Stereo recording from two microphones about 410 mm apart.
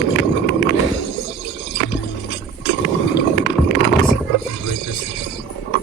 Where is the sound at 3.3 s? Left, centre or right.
Left.